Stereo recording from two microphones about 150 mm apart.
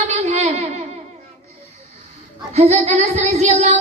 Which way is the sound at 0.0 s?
45° right (ahead or behind).